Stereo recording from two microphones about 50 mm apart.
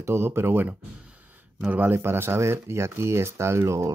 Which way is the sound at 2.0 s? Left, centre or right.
Right.